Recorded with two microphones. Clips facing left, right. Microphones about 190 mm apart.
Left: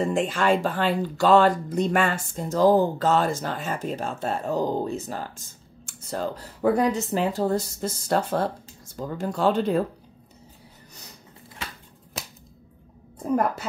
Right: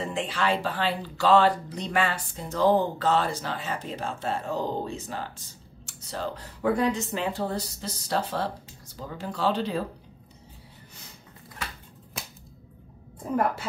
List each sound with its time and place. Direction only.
0.0 s speech: 45° left (ahead or behind)